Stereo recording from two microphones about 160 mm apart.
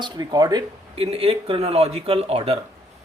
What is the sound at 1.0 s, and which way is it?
Speech, 40° right (ahead or behind).